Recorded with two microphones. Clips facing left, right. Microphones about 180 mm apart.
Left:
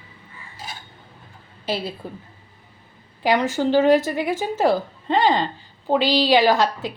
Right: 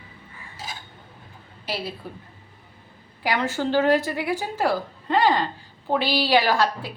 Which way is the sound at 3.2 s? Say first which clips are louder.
Left 5 dB; 20° left (ahead or behind).